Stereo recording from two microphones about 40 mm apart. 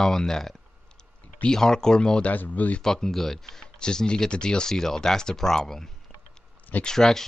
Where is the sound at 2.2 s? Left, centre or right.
Left.